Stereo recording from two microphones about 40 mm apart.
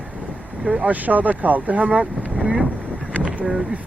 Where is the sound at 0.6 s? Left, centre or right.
Right.